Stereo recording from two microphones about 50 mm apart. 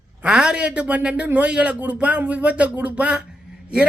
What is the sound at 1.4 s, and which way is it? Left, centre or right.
Speech, centre.